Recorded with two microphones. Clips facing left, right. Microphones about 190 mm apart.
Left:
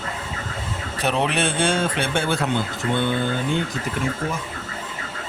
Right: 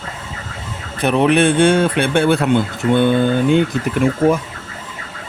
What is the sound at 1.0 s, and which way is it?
A man's voice, 55° right (ahead or behind).